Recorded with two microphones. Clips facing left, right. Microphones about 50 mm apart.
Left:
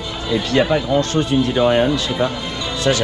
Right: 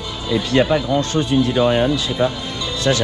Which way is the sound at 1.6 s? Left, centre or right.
Left.